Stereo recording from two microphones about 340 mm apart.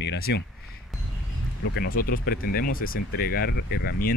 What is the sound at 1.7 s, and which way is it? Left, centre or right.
Speech, left.